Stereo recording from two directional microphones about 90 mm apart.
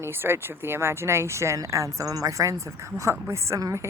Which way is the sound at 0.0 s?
25° right (ahead or behind).